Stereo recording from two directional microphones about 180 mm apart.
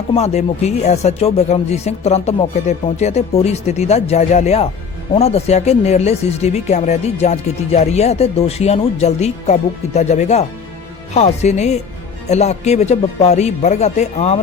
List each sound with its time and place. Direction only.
0.1 s speech: 35° left (ahead or behind)